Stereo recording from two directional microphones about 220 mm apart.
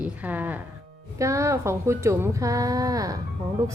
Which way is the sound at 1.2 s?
15° right (ahead or behind).